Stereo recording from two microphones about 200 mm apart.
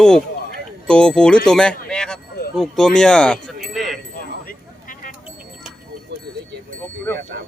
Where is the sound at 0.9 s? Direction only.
5° left (ahead or behind).